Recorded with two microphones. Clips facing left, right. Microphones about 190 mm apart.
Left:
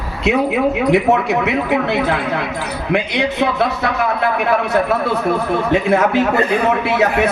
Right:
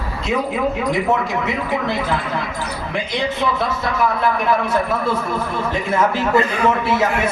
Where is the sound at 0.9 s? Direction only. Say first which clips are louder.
Left 5 dB; 70° left (ahead or behind).